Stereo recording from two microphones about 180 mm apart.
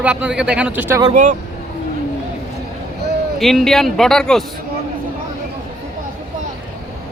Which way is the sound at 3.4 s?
Centre (ahead or behind).